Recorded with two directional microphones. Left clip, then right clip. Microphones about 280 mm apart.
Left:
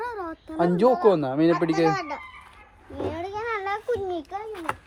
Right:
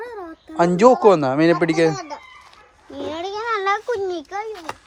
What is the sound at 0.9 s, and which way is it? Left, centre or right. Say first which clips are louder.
Speech: right 7 dB; right.